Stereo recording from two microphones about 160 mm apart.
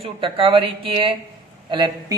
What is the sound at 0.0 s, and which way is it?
A man's voice, 35° right (ahead or behind).